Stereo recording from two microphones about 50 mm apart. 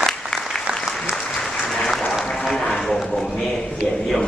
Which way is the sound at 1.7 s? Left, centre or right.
Centre.